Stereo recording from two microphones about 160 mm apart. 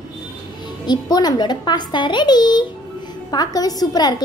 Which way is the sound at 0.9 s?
25° left (ahead or behind).